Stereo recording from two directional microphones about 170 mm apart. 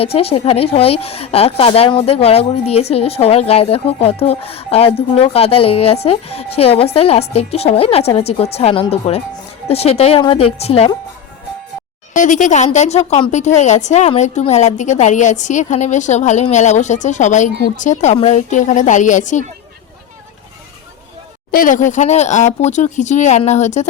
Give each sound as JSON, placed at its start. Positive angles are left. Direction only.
{"t": 0.0, "sound": "a woman's voice", "side_deg": 35}
{"t": 12.1, "sound": "a woman's voice", "side_deg": 50}
{"t": 21.5, "sound": "a woman's voice", "side_deg": 50}